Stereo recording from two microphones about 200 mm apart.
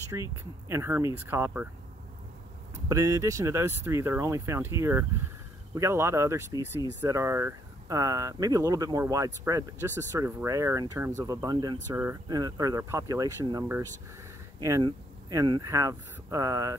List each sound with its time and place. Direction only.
0.1 s speech: 15° right (ahead or behind)
2.7 s speech: 15° right (ahead or behind)